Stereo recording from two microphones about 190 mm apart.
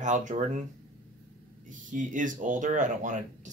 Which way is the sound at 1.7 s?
45° right (ahead or behind).